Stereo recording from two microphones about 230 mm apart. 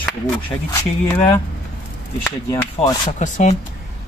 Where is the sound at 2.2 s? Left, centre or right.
Centre.